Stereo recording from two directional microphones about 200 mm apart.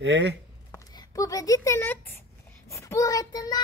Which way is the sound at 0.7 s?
15° left (ahead or behind).